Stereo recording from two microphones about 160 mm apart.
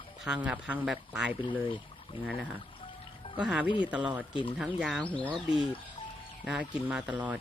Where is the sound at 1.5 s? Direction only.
30° left (ahead or behind).